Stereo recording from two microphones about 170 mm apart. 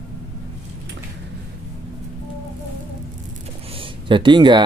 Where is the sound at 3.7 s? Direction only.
30° right (ahead or behind).